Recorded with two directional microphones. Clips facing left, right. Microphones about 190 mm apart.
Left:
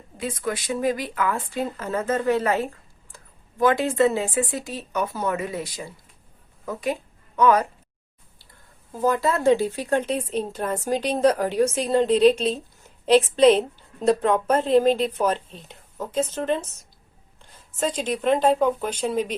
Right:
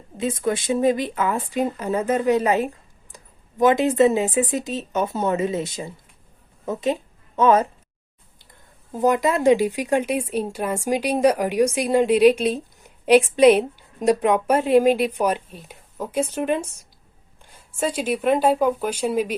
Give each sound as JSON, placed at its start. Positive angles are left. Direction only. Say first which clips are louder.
{"t": 0.2, "sound": "speech", "louder": "right 5 dB", "side_deg": -25}
{"t": 8.9, "sound": "speech", "louder": "right 3 dB", "side_deg": -20}